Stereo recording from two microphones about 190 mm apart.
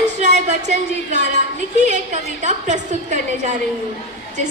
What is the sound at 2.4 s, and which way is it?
A woman's voice, 40° right (ahead or behind).